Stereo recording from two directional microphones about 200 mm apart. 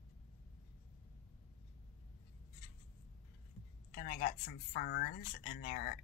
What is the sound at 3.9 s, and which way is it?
Speech, 40° left (ahead or behind).